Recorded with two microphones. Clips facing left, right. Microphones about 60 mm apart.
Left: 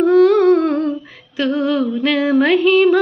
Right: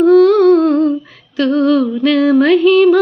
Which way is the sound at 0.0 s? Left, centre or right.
Left.